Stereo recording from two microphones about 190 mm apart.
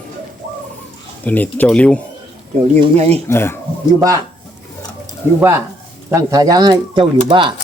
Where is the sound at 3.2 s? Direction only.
15° left (ahead or behind).